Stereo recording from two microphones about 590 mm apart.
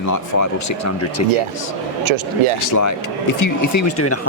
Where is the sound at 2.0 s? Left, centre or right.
Right.